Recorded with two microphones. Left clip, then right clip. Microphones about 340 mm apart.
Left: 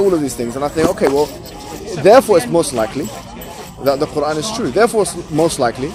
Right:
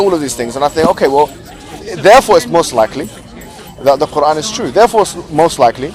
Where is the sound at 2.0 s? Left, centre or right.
Right.